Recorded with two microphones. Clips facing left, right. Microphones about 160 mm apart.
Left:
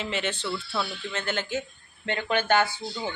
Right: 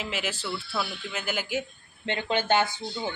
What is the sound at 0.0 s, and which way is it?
Speech, 5° right (ahead or behind).